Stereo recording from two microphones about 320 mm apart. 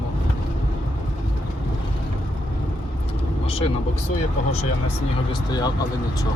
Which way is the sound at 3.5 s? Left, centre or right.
Centre.